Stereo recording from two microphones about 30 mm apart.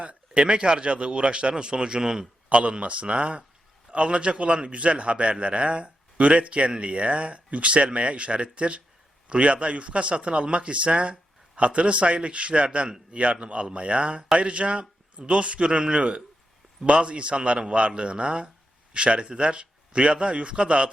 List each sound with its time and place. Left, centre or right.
0.0 s a man's voice: right
2.5 s a man's voice: right